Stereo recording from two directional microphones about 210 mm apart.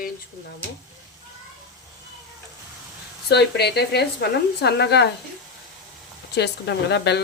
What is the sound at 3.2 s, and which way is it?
A woman's voice, 50° left (ahead or behind).